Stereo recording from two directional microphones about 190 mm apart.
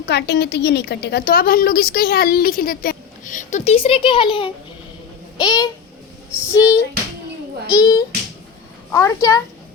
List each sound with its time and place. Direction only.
0.0 s a woman's voice: 60° left (ahead or behind); by 9.4 s 15° left (ahead or behind)